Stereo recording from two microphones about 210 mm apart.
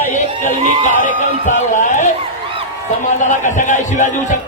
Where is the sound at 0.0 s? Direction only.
35° left (ahead or behind).